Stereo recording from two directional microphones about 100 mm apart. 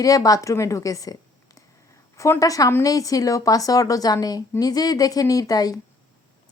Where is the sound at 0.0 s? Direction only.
35° left (ahead or behind).